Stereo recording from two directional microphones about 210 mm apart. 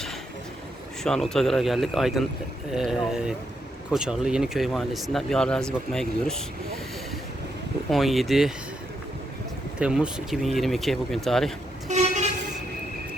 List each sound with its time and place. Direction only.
1.0 s speech: centre (ahead or behind)
7.9 s speech: centre (ahead or behind)
9.7 s speech: 5° right (ahead or behind)
11.9 s vehicle: 35° right (ahead or behind)